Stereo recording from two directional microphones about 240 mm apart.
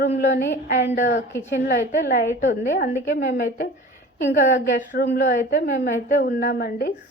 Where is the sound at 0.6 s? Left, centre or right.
Left.